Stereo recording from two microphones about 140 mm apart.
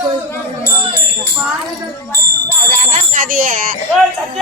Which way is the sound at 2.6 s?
70° right (ahead or behind).